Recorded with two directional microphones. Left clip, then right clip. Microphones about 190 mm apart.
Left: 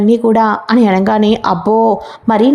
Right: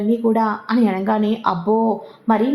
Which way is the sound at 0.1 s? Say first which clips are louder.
Left 7 dB; 40° left (ahead or behind).